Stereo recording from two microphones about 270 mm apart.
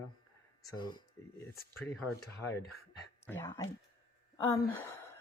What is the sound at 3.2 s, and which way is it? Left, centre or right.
Speech, centre.